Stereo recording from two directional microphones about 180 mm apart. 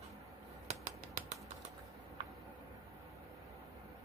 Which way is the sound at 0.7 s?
40° right (ahead or behind).